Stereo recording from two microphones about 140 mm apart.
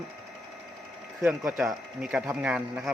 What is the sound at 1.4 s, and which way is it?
Speech, centre (ahead or behind).